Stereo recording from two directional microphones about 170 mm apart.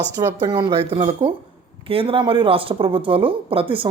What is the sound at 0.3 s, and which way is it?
A woman's voice, 25° right (ahead or behind).